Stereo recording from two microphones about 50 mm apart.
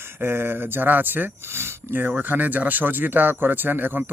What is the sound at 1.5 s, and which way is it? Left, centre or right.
Speech, right.